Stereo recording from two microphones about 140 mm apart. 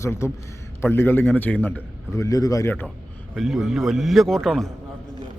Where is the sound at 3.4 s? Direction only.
Centre (ahead or behind).